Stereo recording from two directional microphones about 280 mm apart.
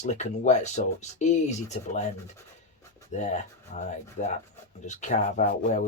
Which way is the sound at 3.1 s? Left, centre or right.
Left.